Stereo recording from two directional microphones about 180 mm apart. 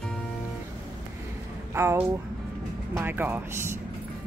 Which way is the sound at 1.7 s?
15° right (ahead or behind).